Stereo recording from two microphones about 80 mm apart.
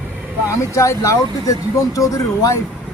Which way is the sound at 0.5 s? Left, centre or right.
Left.